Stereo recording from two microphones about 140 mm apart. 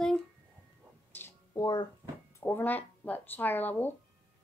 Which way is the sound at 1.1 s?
20° left (ahead or behind).